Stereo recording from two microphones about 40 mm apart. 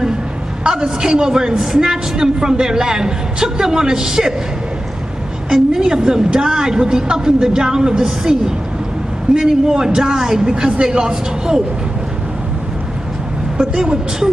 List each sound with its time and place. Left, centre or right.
0.7 s a woman's voice: centre
5.5 s a woman's voice: centre
13.6 s a woman's voice: centre